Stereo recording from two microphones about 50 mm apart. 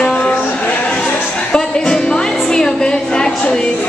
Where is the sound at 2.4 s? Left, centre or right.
Centre.